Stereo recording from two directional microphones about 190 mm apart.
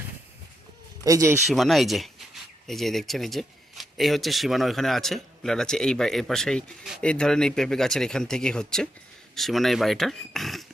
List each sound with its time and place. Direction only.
1.0 s speech: 15° right (ahead or behind)
1.5 s speech: centre (ahead or behind)